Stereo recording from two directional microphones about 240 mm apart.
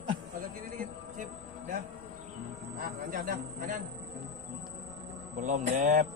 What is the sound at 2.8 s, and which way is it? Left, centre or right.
Speech, right.